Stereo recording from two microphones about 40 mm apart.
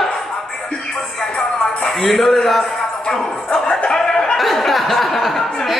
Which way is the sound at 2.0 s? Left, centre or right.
Centre.